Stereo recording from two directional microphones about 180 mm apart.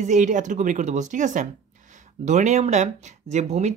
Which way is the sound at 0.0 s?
45° right (ahead or behind).